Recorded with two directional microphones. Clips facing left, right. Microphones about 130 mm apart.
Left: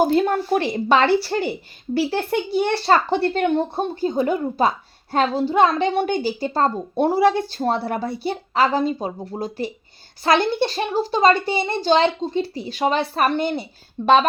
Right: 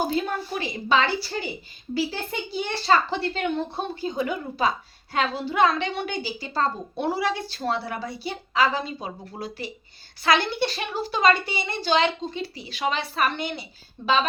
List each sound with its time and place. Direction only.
0.0 s a child's voice: 60° left (ahead or behind)
2.8 s a woman's voice: 50° left (ahead or behind)
5.9 s speech: 50° left (ahead or behind)